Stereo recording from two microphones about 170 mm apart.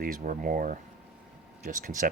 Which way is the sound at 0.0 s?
55° right (ahead or behind).